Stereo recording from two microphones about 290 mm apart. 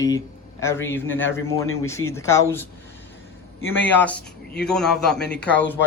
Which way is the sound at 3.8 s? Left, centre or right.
Centre.